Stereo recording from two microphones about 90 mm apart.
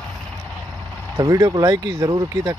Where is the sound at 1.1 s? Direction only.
35° right (ahead or behind).